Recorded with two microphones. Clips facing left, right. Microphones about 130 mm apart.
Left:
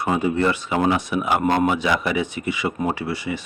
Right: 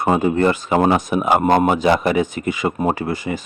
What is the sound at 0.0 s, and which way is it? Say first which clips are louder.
Speech: right 4 dB; 50° right (ahead or behind).